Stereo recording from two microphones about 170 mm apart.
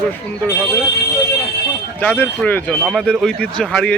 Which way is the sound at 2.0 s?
10° left (ahead or behind).